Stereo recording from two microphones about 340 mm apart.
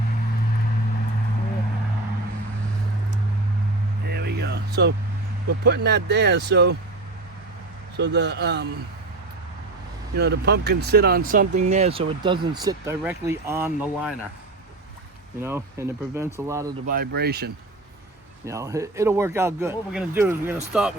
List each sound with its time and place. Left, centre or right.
4.1 s vehicle: right
5.6 s speech: right
7.9 s speech: right
10.2 s speech: right; by 14.2 s centre
15.4 s speech: centre
16.8 s speech: right
18.4 s speech: centre